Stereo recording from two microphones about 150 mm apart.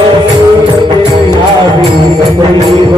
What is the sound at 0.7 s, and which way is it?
Music, 30° right (ahead or behind).